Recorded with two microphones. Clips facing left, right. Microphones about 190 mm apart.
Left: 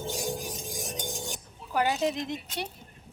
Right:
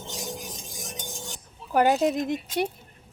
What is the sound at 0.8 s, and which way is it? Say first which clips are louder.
Stir: left 2 dB; 15° left (ahead or behind).